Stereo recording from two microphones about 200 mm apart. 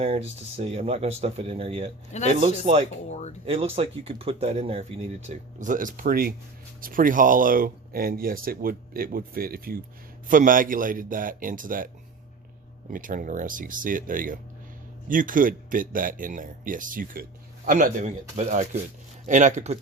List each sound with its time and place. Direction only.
0.0 s speech: 30° right (ahead or behind)
3.1 s speech: 35° left (ahead or behind)
3.4 s speech: 30° right (ahead or behind)
12.9 s speech: 45° right (ahead or behind)